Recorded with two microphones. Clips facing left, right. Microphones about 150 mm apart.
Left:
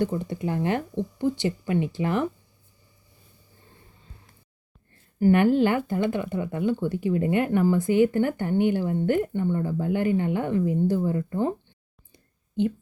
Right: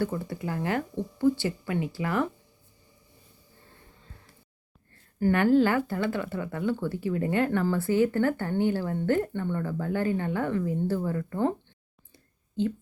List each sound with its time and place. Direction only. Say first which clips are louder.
0.0 s speech: left 4 dB; 20° left (ahead or behind)
5.2 s speech: left 2 dB; 20° left (ahead or behind)
12.1 s a sound: left 4 dB; 15° left (ahead or behind)